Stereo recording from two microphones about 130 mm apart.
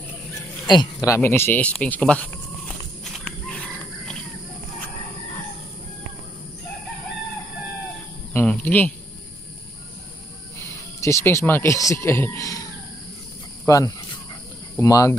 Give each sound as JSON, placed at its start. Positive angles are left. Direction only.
{"t": 0.7, "sound": "speech", "side_deg": 30}
{"t": 3.0, "sound": "horse", "side_deg": 0}
{"t": 8.3, "sound": "speech", "side_deg": 15}
{"t": 10.6, "sound": "speech", "side_deg": 25}
{"t": 13.7, "sound": "speech", "side_deg": 25}